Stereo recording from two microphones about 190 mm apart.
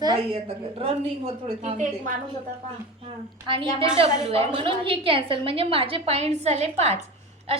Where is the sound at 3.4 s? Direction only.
25° right (ahead or behind).